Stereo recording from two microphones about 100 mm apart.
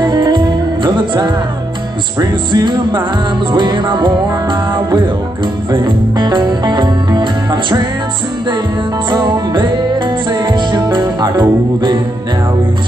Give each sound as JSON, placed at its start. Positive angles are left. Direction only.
{"t": 0.0, "sound": "music", "side_deg": -45}
{"t": 5.7, "sound": "speech", "side_deg": -45}
{"t": 9.1, "sound": "music", "side_deg": -45}